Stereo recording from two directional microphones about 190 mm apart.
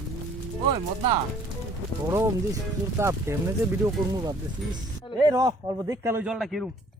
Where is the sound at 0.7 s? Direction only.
25° right (ahead or behind).